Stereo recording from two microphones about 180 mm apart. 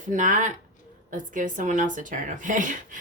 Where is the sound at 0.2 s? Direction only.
45° right (ahead or behind).